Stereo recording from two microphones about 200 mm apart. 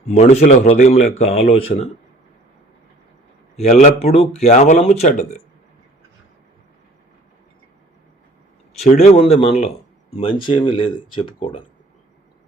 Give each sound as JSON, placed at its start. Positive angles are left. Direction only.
{"t": 0.2, "sound": "speech", "side_deg": 35}
{"t": 3.6, "sound": "speech", "side_deg": 35}
{"t": 8.8, "sound": "speech", "side_deg": 30}